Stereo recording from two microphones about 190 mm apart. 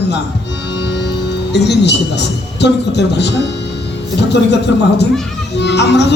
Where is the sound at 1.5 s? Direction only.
60° left (ahead or behind).